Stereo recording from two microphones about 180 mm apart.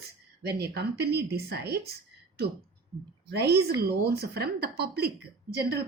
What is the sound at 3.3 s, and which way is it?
A woman's voice, 65° right (ahead or behind).